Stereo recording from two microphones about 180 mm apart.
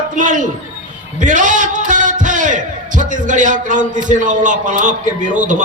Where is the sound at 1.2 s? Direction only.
45° right (ahead or behind).